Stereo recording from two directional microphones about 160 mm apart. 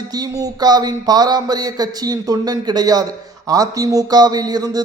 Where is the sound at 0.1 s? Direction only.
25° right (ahead or behind).